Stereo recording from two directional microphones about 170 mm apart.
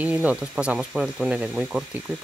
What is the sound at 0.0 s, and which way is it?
Speech, 10° right (ahead or behind).